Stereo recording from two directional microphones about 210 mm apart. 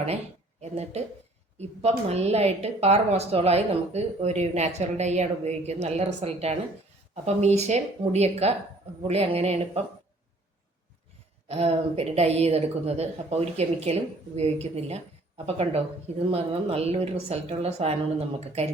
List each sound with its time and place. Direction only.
0.6 s a woman's voice: 30° right (ahead or behind)
11.4 s a woman's voice: 30° right (ahead or behind)